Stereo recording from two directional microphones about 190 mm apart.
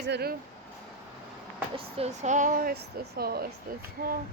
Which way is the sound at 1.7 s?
35° right (ahead or behind).